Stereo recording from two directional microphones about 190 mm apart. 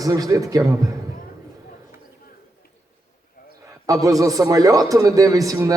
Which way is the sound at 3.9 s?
20° right (ahead or behind).